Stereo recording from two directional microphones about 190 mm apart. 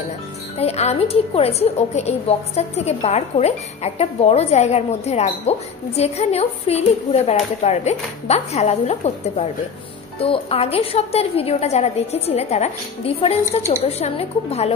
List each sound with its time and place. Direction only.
0.6 s a woman's voice: 35° left (ahead or behind)